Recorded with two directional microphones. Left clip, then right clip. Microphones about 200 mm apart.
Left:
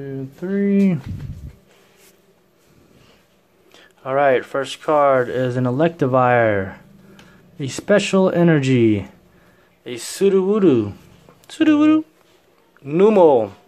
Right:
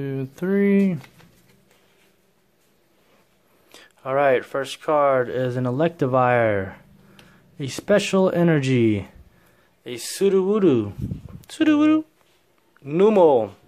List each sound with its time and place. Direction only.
0.0 s speech: 40° right (ahead or behind)
3.7 s speech: 15° right (ahead or behind)